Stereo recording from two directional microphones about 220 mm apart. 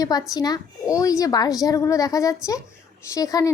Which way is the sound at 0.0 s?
15° left (ahead or behind).